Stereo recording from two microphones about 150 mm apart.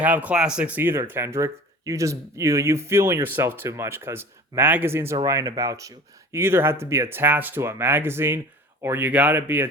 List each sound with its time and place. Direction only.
0.0 s speech: 10° right (ahead or behind)